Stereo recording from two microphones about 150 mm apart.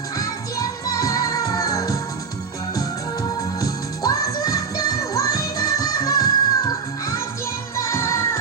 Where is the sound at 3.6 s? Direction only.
25° left (ahead or behind).